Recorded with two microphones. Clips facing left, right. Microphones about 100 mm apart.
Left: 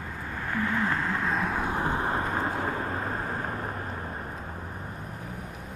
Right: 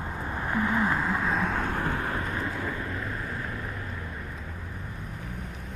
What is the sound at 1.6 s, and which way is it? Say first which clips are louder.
Vehicle: left 2 dB; 20° left (ahead or behind).